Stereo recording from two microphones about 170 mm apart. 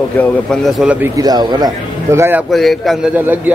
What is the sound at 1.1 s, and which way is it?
Speech, 25° right (ahead or behind).